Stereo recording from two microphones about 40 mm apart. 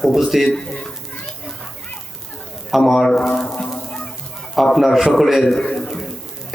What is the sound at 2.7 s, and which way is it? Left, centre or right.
Speech, centre.